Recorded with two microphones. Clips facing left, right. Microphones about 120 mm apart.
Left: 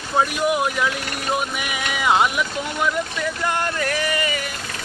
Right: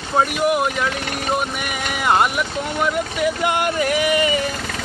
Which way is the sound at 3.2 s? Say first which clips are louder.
Right 4 dB; 15° right (ahead or behind).